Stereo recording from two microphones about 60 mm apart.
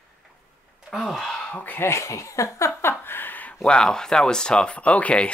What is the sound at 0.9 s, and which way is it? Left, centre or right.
Speech, centre.